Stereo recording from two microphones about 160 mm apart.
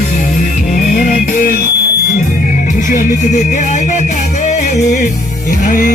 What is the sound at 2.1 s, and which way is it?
Music, 55° left (ahead or behind).